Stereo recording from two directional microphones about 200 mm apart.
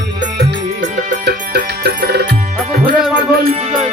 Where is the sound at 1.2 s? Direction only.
55° right (ahead or behind).